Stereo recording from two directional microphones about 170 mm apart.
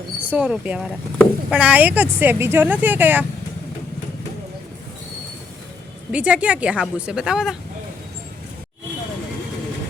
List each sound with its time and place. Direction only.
0.3 s speech: 5° right (ahead or behind)
6.1 s speech: 5° right (ahead or behind)